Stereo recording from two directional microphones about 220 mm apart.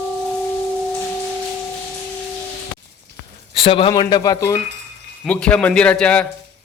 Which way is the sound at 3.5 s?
25° left (ahead or behind).